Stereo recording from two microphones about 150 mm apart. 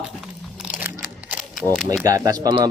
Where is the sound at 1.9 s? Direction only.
20° right (ahead or behind).